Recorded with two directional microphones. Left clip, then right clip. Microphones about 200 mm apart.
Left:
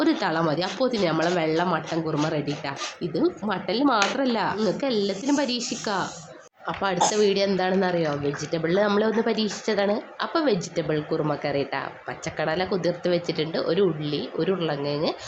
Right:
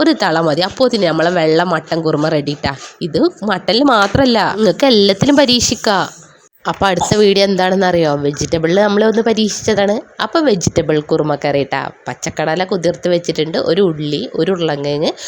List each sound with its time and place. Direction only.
0.0 s speech: 45° right (ahead or behind)